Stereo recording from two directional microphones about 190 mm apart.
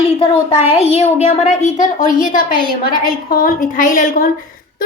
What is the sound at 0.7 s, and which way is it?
A child's voice, 30° left (ahead or behind).